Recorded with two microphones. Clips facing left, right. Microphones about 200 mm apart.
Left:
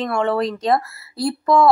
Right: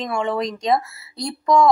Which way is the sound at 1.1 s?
5° left (ahead or behind).